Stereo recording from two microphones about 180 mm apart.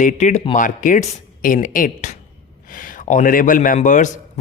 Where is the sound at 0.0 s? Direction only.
40° left (ahead or behind).